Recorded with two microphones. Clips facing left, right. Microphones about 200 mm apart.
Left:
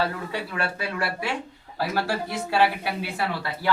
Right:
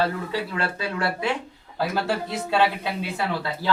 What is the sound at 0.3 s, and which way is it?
A man's voice, 20° right (ahead or behind).